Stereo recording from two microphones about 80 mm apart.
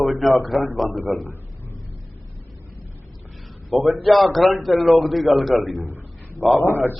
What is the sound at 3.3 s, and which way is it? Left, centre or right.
A man's voice, centre.